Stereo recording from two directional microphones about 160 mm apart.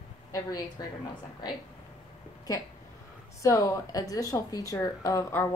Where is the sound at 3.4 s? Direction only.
20° left (ahead or behind).